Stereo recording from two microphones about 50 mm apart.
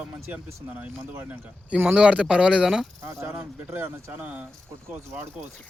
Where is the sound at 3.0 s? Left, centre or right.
Right.